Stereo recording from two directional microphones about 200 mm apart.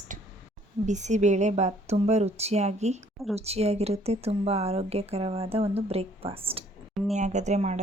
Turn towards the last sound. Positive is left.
turn(degrees=-35)  # may be behind; listen again after turning